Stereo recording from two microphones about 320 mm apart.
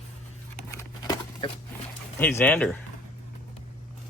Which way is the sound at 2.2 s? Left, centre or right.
Centre.